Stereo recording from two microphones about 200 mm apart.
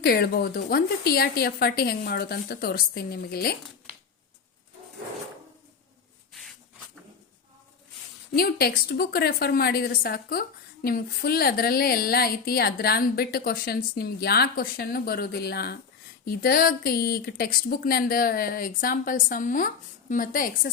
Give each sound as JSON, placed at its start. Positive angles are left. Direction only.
{"t": 0.0, "sound": "a woman's voice", "side_deg": 50}
{"t": 8.3, "sound": "a woman's voice", "side_deg": 50}